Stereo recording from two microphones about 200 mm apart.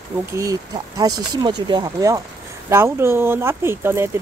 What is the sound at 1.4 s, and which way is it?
Speech, 20° right (ahead or behind).